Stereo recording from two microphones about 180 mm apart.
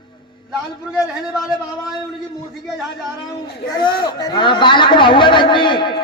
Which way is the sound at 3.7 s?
25° left (ahead or behind).